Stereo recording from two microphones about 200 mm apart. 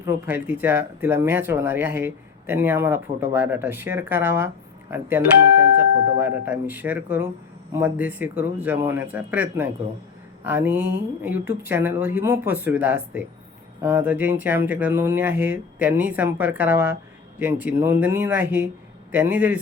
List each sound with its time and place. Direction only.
0.0 s speech: 10° right (ahead or behind)